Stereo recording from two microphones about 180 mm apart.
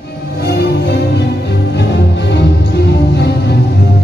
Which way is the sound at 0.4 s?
65° left (ahead or behind).